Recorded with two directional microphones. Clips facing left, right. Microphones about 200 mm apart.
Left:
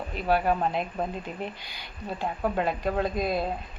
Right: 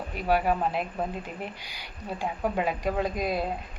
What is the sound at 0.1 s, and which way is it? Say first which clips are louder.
A woman's voice: even; 10° right (ahead or behind).